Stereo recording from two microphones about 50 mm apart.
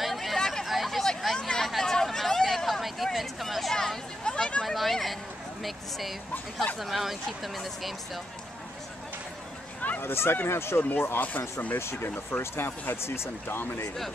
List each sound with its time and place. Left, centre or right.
0.0 s hubbub: centre
0.4 s hubbub: centre
0.7 s hubbub: centre
3.7 s a sound: centre
4.6 s a sound: centre
5.6 s speech: centre
9.8 s a sound: left
10.0 s speech: left
10.8 s speech: left
11.8 s speech: left